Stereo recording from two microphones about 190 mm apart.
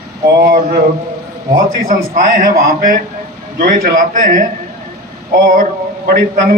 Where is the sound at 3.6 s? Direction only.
50° right (ahead or behind).